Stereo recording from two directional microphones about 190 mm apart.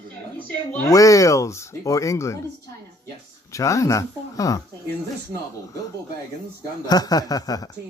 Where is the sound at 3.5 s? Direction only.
15° left (ahead or behind).